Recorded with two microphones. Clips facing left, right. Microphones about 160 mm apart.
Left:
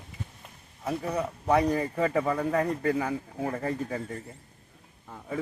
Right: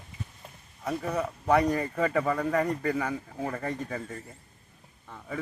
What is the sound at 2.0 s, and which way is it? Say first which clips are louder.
Speech: even; 25° left (ahead or behind).